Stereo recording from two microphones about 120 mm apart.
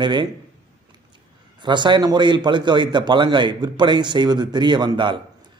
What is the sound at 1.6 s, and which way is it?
A man's voice, 40° right (ahead or behind).